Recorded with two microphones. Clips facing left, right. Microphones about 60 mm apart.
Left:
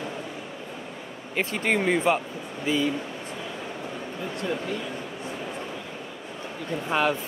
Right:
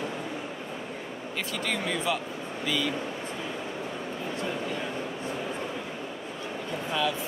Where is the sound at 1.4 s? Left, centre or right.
Left.